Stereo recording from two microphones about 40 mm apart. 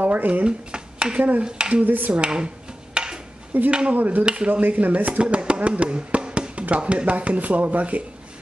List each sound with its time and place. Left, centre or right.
0.0 s a sound: right
0.3 s speech: right
1.9 s speech: right
2.2 s a sound: right
3.5 s speech: right
5.2 s music: right
6.8 s speech: right
7.1 s speech: right